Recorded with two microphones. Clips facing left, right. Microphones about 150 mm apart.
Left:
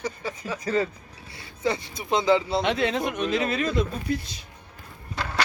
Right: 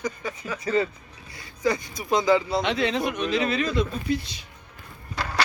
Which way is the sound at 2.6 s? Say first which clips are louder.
Even; 50° left (ahead or behind).